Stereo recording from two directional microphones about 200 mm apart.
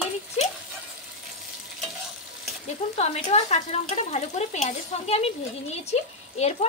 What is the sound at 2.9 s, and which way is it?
Speech, 35° left (ahead or behind).